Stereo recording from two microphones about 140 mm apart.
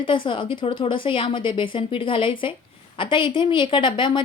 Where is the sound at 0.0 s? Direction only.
35° left (ahead or behind).